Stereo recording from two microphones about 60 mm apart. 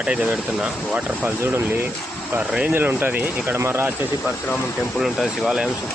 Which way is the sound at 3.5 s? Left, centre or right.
Right.